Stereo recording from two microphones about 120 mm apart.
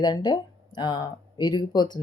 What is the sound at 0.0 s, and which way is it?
Speech, 35° left (ahead or behind).